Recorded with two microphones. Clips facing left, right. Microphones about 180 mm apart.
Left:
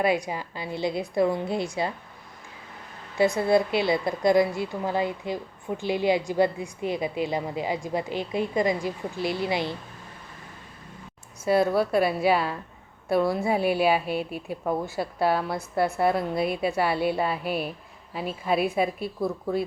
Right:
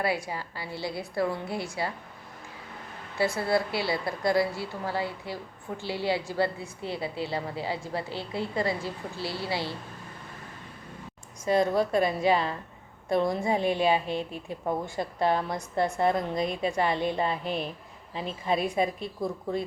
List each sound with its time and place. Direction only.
0.0 s a woman's voice: 20° left (ahead or behind)
3.2 s a woman's voice: 20° left (ahead or behind)
11.4 s a woman's voice: 10° left (ahead or behind)